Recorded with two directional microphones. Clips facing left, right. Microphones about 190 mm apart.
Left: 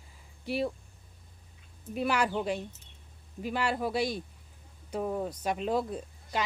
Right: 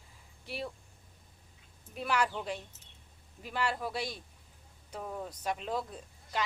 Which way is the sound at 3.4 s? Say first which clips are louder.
Left 4 dB; 5° left (ahead or behind).